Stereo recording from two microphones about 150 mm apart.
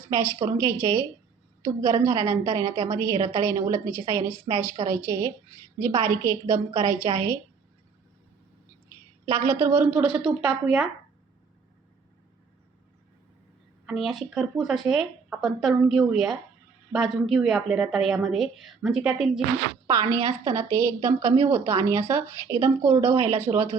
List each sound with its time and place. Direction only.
0.1 s a woman's voice: 20° right (ahead or behind)
9.2 s a woman's voice: 20° right (ahead or behind)
13.8 s speech: centre (ahead or behind)
19.9 s a woman's voice: 20° right (ahead or behind)